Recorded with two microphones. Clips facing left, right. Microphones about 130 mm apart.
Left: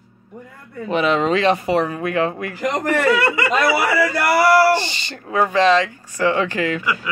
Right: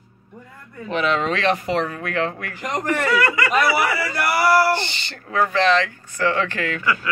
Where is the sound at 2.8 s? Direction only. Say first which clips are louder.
Left 3 dB; 25° left (ahead or behind).